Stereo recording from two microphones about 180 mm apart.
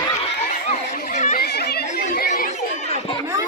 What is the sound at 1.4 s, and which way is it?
Chatter, 60° left (ahead or behind).